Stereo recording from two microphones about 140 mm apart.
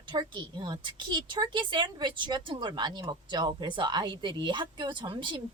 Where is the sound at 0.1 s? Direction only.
30° right (ahead or behind).